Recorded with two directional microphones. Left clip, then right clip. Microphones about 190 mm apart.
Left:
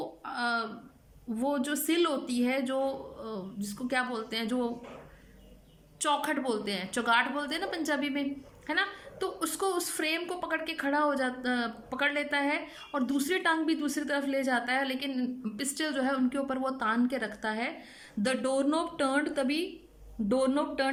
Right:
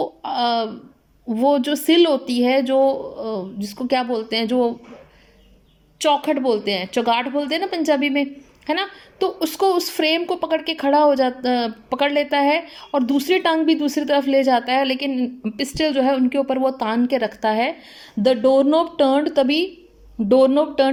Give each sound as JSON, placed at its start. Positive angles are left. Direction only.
{"t": 0.0, "sound": "a sound", "side_deg": -25}
{"t": 1.3, "sound": "speech", "side_deg": -25}
{"t": 6.0, "sound": "speech", "side_deg": -20}